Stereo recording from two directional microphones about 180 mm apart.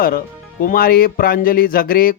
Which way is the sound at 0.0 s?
55° left (ahead or behind).